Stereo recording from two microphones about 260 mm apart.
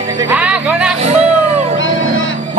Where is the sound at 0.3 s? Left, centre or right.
Centre.